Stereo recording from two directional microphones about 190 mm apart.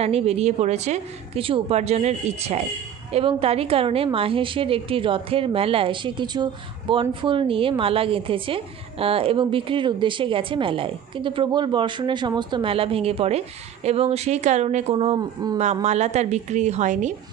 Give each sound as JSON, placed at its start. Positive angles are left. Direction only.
{"t": 0.0, "sound": "a woman's voice", "side_deg": -35}